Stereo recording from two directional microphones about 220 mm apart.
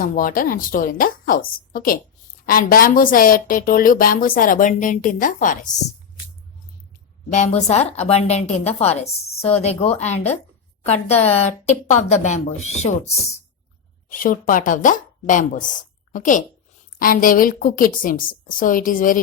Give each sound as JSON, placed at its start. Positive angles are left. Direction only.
{"t": 0.0, "sound": "a woman's voice", "side_deg": 40}
{"t": 7.3, "sound": "a woman's voice", "side_deg": 30}